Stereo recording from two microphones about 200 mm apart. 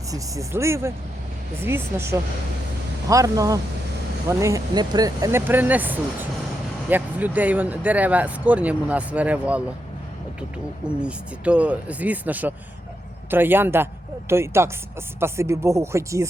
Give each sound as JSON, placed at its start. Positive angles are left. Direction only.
{"t": 0.1, "sound": "speech", "side_deg": -15}
{"t": 10.8, "sound": "speech", "side_deg": -5}